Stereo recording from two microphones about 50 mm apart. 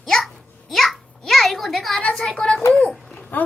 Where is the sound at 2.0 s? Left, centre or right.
Centre.